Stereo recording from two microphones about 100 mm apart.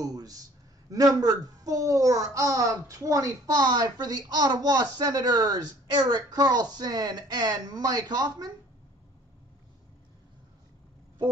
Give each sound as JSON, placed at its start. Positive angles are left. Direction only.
{"t": 0.0, "sound": "a woman's voice", "side_deg": -40}